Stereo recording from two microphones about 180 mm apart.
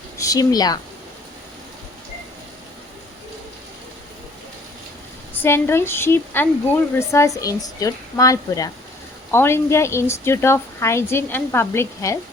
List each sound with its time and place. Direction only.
0.2 s a woman's voice: 20° left (ahead or behind)
5.3 s speech: 10° left (ahead or behind)